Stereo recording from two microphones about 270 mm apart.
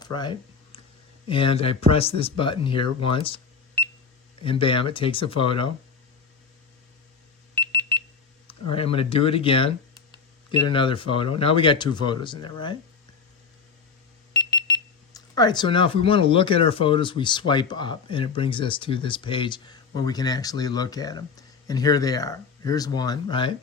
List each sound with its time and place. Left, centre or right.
0.0 s a sound: centre
1.3 s speech: centre
4.4 s speech: centre
7.5 s alarm: centre
8.7 s speech: left
10.7 s speech: centre
15.1 s speech: centre